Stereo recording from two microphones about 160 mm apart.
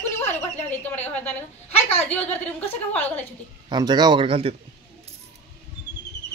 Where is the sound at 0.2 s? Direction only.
10° left (ahead or behind).